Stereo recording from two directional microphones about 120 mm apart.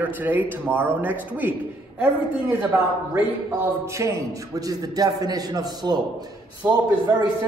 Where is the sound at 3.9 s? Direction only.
25° right (ahead or behind).